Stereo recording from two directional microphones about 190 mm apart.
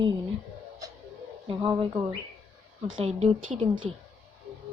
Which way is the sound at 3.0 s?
35° right (ahead or behind).